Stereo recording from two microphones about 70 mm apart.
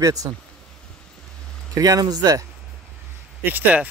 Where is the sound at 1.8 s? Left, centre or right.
Right.